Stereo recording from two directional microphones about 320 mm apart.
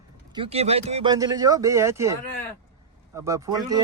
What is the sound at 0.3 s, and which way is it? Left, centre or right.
Speech, centre.